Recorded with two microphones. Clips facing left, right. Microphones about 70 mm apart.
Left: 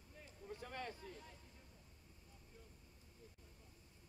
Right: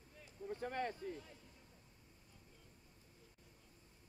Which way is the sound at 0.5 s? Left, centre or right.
Right.